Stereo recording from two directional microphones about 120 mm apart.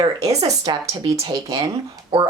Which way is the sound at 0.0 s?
35° right (ahead or behind).